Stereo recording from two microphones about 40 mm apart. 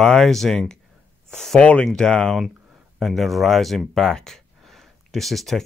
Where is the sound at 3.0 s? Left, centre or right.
Centre.